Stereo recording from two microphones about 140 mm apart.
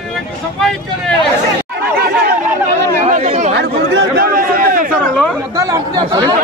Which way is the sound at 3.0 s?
50° right (ahead or behind).